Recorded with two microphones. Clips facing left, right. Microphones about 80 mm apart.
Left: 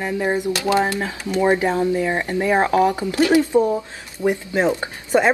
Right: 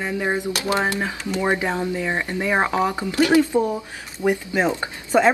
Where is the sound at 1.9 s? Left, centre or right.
Centre.